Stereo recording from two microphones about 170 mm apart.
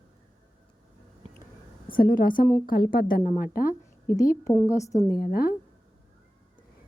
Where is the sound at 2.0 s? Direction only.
55° left (ahead or behind).